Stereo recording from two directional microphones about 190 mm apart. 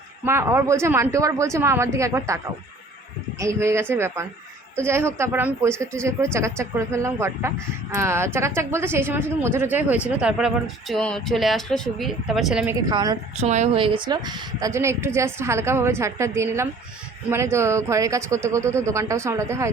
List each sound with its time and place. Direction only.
0.3 s speech: 15° right (ahead or behind)
12.6 s a woman's voice: 20° right (ahead or behind)
13.4 s speech: 35° right (ahead or behind); by 19.7 s 15° right (ahead or behind)